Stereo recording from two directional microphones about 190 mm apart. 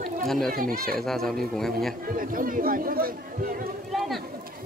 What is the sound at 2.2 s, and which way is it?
Speech, 45° right (ahead or behind).